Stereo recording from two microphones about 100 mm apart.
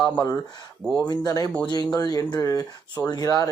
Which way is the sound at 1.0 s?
45° left (ahead or behind).